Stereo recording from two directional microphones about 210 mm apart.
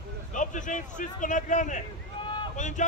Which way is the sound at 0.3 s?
35° left (ahead or behind).